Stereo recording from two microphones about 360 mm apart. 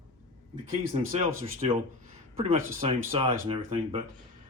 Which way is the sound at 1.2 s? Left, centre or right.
Centre.